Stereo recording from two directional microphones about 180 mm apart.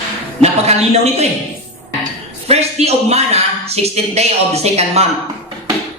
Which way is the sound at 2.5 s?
35° right (ahead or behind).